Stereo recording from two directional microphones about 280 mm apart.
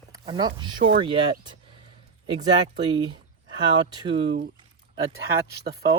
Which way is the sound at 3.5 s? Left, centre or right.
Centre.